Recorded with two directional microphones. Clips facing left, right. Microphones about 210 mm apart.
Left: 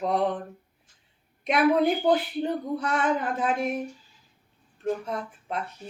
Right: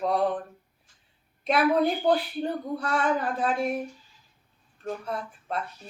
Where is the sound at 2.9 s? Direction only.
20° left (ahead or behind).